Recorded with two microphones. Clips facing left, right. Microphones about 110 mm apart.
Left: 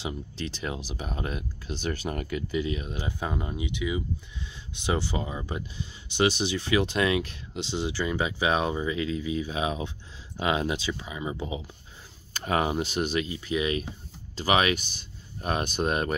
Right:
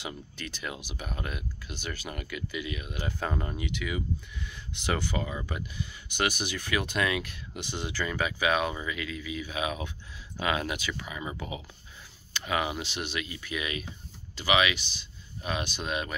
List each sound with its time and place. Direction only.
0.0 s speech: 30° left (ahead or behind)
3.0 s speech: 15° left (ahead or behind)
12.4 s speech: 40° left (ahead or behind)